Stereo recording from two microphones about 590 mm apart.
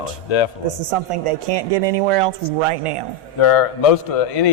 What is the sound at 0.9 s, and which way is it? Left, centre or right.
Speech, right.